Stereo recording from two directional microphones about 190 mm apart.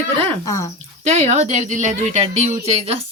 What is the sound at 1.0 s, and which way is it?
A woman's voice, 35° right (ahead or behind).